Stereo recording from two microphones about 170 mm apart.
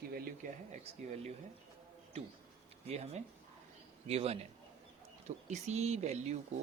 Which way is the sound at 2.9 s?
40° right (ahead or behind).